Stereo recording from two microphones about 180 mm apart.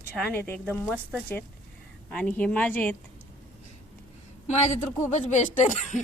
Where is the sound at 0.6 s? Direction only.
5° right (ahead or behind).